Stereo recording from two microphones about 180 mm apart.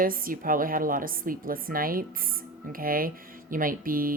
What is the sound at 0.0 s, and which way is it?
Speech, 50° right (ahead or behind).